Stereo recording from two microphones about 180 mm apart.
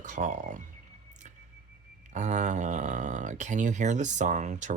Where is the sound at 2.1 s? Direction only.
40° right (ahead or behind).